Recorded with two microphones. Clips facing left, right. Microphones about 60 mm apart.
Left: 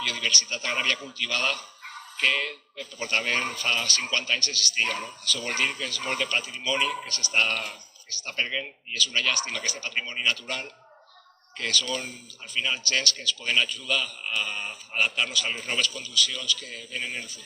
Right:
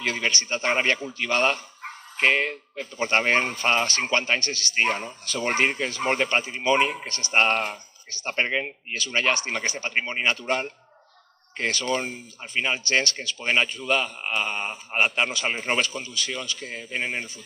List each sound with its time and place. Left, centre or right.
0.0 s speech: right